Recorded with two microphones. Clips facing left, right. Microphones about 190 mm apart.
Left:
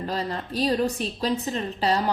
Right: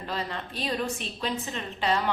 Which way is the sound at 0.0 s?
40° left (ahead or behind).